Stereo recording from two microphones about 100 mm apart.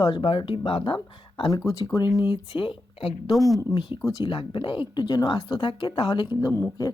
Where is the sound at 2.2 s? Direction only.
55° left (ahead or behind).